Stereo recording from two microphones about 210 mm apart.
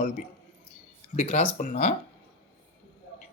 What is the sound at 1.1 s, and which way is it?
Speech, 35° left (ahead or behind).